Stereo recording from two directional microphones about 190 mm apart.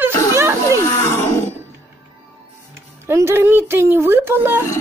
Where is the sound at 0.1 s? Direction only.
20° left (ahead or behind).